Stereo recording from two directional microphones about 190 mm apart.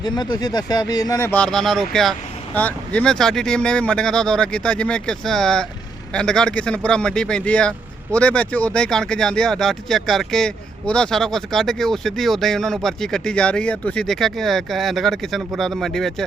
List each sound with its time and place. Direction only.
0.0 s speech: 20° left (ahead or behind)
1.3 s speech: 5° left (ahead or behind)